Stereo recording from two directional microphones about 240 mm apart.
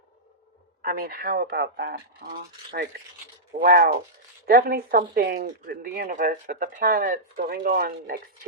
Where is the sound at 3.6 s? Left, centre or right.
Right.